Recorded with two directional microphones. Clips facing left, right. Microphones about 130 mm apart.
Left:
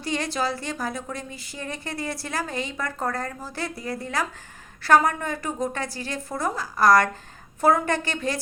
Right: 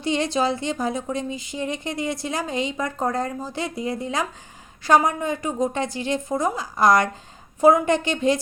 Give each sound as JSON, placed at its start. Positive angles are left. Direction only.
{"t": 0.0, "sound": "a woman's voice", "side_deg": -20}